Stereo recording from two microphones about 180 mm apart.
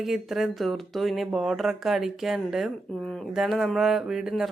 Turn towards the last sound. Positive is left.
turn(degrees=-5)  # may be behind; listen again after turning